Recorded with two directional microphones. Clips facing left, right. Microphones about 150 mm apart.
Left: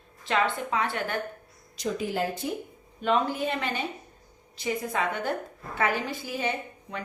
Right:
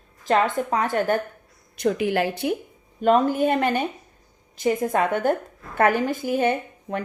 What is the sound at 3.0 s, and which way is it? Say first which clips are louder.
A woman's voice: right 7 dB; 45° right (ahead or behind).